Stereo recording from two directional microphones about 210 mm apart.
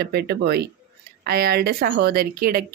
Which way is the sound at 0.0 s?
50° right (ahead or behind).